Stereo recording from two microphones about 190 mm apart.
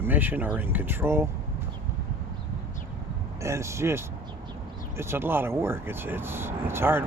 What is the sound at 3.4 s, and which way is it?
Speech, 15° right (ahead or behind).